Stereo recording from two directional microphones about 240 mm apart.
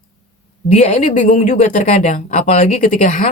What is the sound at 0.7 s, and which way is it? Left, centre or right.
Speech, left.